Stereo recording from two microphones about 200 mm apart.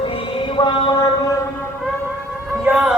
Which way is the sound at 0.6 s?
25° left (ahead or behind).